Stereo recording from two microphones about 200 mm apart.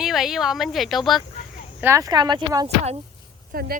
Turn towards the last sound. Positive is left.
turn(degrees=-50)  # may be behind; listen again after turning